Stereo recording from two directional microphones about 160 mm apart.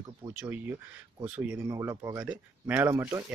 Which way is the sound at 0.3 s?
10° right (ahead or behind).